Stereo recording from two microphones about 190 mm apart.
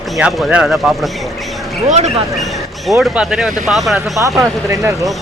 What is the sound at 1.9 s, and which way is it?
Speech, 35° right (ahead or behind).